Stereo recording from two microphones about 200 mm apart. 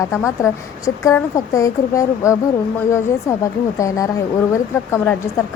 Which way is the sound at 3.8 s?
15° left (ahead or behind).